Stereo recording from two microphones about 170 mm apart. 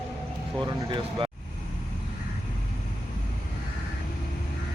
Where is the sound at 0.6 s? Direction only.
25° right (ahead or behind).